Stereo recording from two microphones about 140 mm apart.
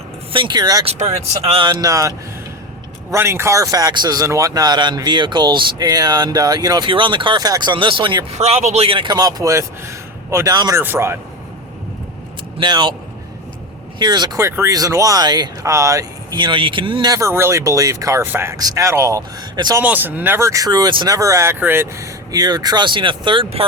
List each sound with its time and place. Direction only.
0.3 s speech: 35° right (ahead or behind)
0.9 s speech: 50° right (ahead or behind)
1.7 s speech: 25° right (ahead or behind)
8.4 s speech: 50° right (ahead or behind); by 11.2 s 20° right (ahead or behind)
12.5 s speech: 30° right (ahead or behind)
14.0 s speech: 30° right (ahead or behind)
19.8 s speech: 10° right (ahead or behind); by 23.6 s 40° right (ahead or behind)